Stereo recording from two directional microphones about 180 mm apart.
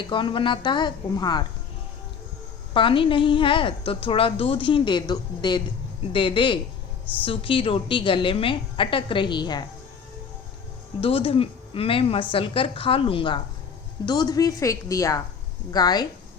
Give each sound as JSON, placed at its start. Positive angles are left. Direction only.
{"t": 0.1, "sound": "a woman's voice", "side_deg": 25}
{"t": 2.7, "sound": "a woman's voice", "side_deg": 30}
{"t": 11.0, "sound": "a woman's voice", "side_deg": 30}